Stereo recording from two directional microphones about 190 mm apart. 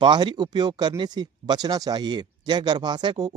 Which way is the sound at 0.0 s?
25° right (ahead or behind).